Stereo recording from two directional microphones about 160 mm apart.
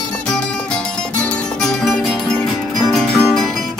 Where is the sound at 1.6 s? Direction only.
Centre (ahead or behind).